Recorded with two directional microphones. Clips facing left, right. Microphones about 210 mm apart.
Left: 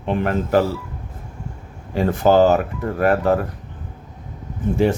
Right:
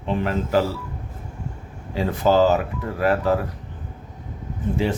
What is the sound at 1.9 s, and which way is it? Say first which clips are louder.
Speech: left 3 dB; 50° left (ahead or behind).